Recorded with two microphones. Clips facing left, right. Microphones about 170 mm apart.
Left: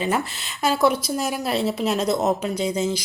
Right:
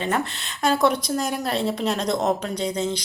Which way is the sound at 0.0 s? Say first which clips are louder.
Left 1 dB; 5° left (ahead or behind).